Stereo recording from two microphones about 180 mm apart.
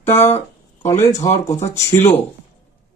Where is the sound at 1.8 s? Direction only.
15° left (ahead or behind).